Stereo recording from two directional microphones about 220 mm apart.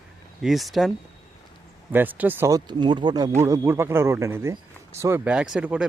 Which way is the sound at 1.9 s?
10° right (ahead or behind).